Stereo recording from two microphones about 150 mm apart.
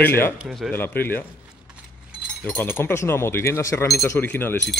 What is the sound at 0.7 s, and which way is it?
Speech, 15° left (ahead or behind).